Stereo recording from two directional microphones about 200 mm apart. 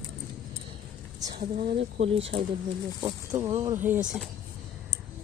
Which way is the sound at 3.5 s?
25° right (ahead or behind).